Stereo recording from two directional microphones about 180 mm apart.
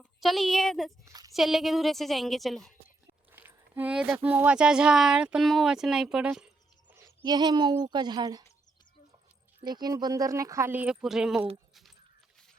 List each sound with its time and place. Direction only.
0.0 s speech: centre (ahead or behind)
1.0 s a woman's voice: 20° right (ahead or behind)
1.3 s speech: centre (ahead or behind)
3.3 s speech: 10° right (ahead or behind)
6.9 s speech: 20° right (ahead or behind)
9.6 s speech: 25° right (ahead or behind); by 11.4 s 5° right (ahead or behind)